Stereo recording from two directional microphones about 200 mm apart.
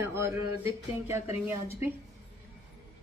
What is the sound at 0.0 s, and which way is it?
Speech, 15° right (ahead or behind).